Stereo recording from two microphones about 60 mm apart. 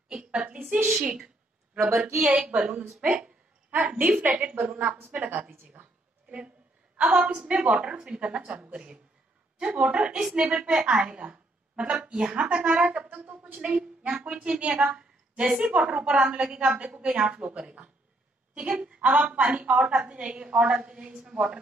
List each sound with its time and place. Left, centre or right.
0.1 s a sound: centre
2.1 s a woman's voice: centre
3.7 s a woman's voice: right
7.0 s a woman's voice: right